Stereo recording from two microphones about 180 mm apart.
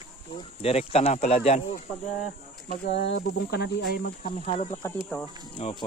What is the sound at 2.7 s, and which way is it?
Speech, 65° left (ahead or behind).